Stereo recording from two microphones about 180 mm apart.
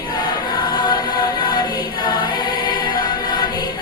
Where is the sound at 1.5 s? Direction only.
25° left (ahead or behind).